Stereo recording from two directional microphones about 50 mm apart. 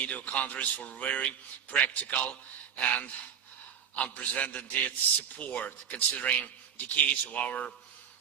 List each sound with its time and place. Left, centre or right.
0.0 s a man's voice: left
3.9 s a man's voice: left